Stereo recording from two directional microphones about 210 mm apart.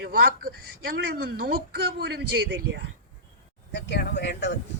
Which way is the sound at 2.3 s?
60° right (ahead or behind).